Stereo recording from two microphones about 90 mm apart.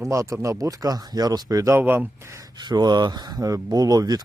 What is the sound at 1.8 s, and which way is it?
Speech, 25° right (ahead or behind).